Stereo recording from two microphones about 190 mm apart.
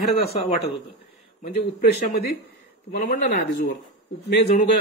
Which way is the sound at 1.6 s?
55° left (ahead or behind).